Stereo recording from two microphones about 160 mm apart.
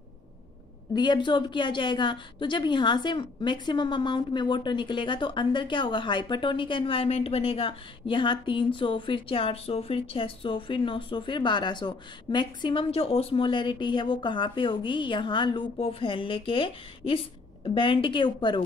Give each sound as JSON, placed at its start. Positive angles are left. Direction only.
{"t": 0.9, "sound": "a woman's voice", "side_deg": 30}